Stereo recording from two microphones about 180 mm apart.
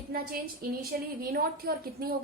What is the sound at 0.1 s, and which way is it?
A woman's voice, 55° right (ahead or behind).